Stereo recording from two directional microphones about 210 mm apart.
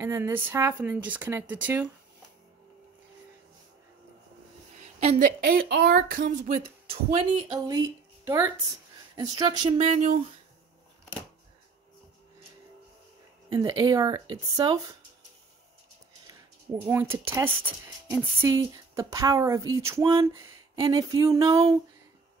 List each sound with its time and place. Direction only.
0.0 s speech: 10° right (ahead or behind)
5.0 s speech: 40° right (ahead or behind); by 9.8 s 25° right (ahead or behind)
13.5 s speech: 20° right (ahead or behind)
16.8 s speech: 10° right (ahead or behind)